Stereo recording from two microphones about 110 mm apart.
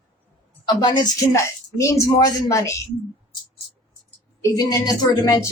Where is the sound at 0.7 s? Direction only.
40° left (ahead or behind).